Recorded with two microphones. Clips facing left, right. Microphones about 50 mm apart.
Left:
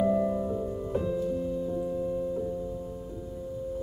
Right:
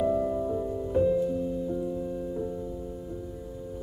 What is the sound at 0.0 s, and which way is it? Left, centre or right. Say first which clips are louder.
Music: left 1 dB; left.